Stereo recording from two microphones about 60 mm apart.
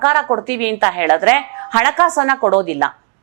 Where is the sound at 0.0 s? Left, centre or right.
Right.